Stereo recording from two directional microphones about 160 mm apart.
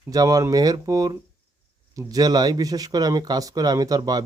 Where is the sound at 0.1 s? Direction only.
20° right (ahead or behind).